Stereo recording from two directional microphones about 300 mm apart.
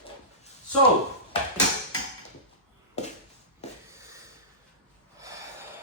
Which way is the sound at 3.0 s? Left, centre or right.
Left.